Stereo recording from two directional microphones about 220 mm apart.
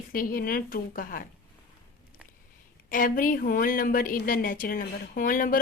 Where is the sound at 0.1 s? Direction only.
40° left (ahead or behind).